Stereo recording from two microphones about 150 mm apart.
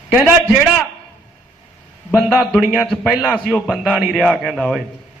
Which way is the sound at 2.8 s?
5° left (ahead or behind).